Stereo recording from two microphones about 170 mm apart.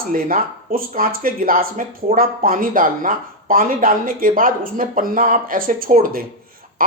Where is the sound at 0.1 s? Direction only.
55° right (ahead or behind).